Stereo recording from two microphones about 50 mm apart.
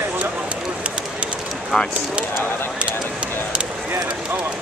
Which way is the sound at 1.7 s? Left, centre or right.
Centre.